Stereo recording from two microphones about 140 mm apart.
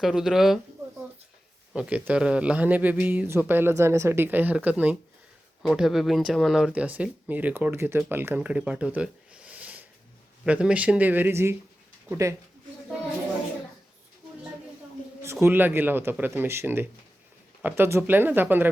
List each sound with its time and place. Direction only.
0.0 s speech: 5° right (ahead or behind)
1.7 s speech: 10° right (ahead or behind)
15.2 s speech: 20° right (ahead or behind)